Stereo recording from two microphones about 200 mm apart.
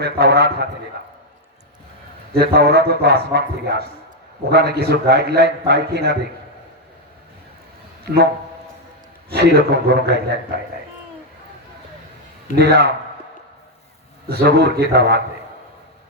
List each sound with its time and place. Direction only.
0.0 s a man's voice: 55° right (ahead or behind)
2.3 s a man's voice: 55° right (ahead or behind)
9.3 s a man's voice: 55° right (ahead or behind)
12.5 s a man's voice: 55° right (ahead or behind)
14.3 s a man's voice: 55° right (ahead or behind)